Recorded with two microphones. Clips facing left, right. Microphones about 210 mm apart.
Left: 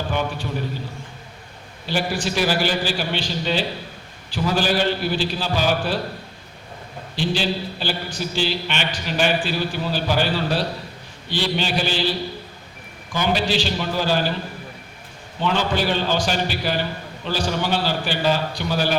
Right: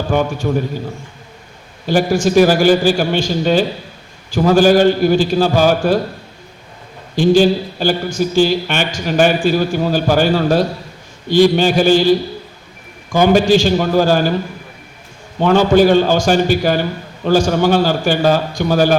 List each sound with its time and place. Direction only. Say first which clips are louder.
0.1 s speech: right 13 dB; 45° right (ahead or behind)
1.9 s speech: right 10 dB; 45° right (ahead or behind)
7.2 s speech: right 12 dB; 45° right (ahead or behind)
15.4 s speech: right 11 dB; 45° right (ahead or behind)